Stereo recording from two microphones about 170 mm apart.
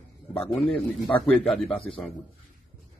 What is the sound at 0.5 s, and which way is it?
A man's voice, centre (ahead or behind).